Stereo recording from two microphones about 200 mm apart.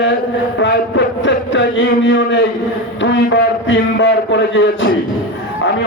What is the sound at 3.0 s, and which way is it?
A man's voice, 65° left (ahead or behind).